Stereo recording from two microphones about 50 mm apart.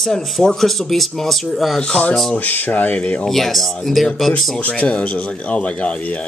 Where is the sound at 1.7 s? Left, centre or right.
Centre.